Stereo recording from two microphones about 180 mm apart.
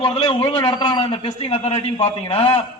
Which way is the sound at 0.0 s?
35° left (ahead or behind).